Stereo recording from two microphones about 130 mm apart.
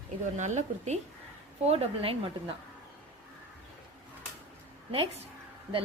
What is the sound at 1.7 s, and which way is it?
Speech, 50° right (ahead or behind).